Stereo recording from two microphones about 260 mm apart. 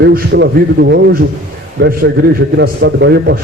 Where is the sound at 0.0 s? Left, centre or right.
Right.